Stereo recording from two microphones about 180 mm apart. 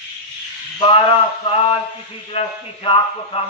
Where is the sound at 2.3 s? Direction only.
30° left (ahead or behind).